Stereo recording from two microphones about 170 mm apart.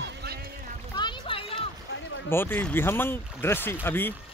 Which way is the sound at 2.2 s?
15° left (ahead or behind).